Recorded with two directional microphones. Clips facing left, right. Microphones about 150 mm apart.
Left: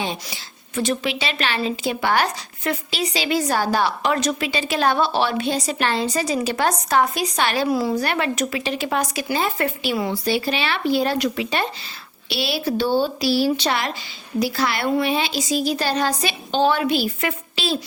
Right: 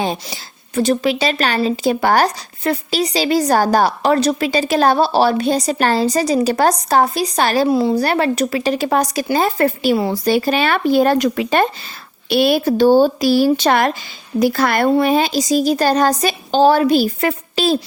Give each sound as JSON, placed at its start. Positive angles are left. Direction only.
{"t": 0.0, "sound": "speech", "side_deg": -40}
{"t": 7.7, "sound": "a woman's voice", "side_deg": -25}
{"t": 14.8, "sound": "a woman's voice", "side_deg": -40}